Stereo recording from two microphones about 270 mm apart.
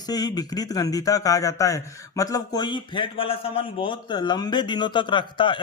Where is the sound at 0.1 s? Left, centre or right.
Centre.